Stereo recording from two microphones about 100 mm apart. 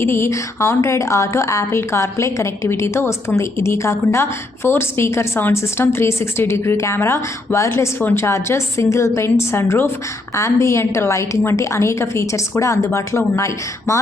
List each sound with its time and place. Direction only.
0.0 s a woman's voice: 25° left (ahead or behind)